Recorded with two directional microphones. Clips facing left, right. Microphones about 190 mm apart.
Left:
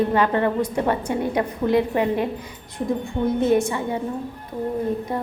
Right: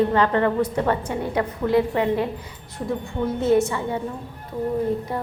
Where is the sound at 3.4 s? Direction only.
15° left (ahead or behind).